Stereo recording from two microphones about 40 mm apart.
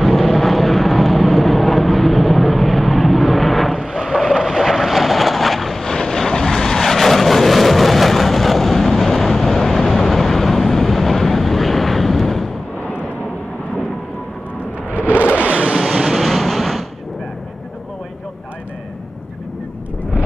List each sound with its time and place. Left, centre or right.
0.0 s vehicle: centre
5.9 s vehicle: centre
14.9 s a sound: right
15.3 s vehicle: right
15.8 s vehicle: centre
16.2 s a sound: centre